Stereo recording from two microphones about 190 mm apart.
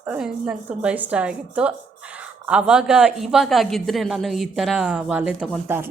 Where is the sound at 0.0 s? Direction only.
5° right (ahead or behind).